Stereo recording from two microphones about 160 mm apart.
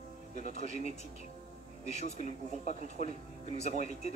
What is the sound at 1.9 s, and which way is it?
Speech, 40° left (ahead or behind).